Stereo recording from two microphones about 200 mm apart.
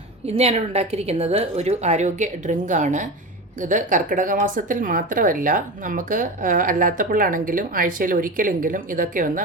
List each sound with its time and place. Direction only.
0.3 s a woman's voice: 30° right (ahead or behind)